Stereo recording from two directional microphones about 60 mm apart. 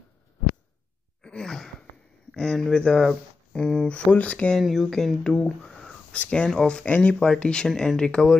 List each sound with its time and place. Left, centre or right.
1.2 s a sound: centre
2.3 s speech: centre
4.1 s speech: left
4.6 s speech: centre
6.1 s speech: left
6.4 s speech: centre